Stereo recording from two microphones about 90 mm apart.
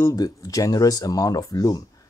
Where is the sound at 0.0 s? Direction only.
45° left (ahead or behind).